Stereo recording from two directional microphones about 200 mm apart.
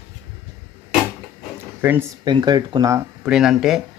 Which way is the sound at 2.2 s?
20° right (ahead or behind).